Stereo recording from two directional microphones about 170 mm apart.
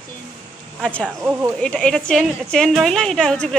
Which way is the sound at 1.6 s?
5° left (ahead or behind).